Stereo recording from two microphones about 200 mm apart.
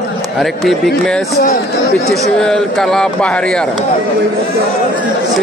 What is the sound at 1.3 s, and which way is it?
Speech, 50° left (ahead or behind).